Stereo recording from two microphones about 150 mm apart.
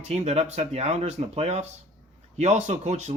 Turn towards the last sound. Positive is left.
turn(degrees=-50)  # may be behind; listen again after turning